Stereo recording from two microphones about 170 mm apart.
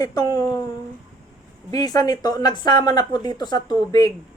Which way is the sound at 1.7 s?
20° left (ahead or behind).